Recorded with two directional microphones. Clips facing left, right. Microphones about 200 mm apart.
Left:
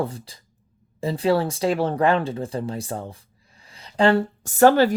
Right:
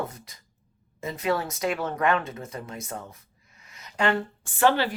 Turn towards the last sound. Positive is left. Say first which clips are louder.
# left 7 dB
turn(degrees=45)  # may be behind; listen again after turning